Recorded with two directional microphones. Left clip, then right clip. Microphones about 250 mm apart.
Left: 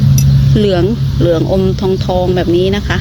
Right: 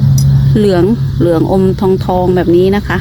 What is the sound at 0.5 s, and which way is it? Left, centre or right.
Speech, right.